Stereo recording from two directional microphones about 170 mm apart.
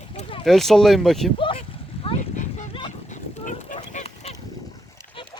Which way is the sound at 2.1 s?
45° left (ahead or behind).